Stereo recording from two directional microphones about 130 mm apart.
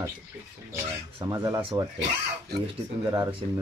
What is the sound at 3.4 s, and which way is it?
Speech, 40° right (ahead or behind).